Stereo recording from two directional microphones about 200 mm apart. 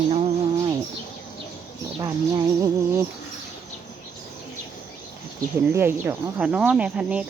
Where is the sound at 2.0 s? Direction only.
15° right (ahead or behind).